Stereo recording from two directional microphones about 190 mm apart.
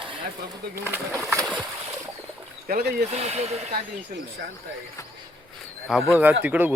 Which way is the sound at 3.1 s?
35° right (ahead or behind).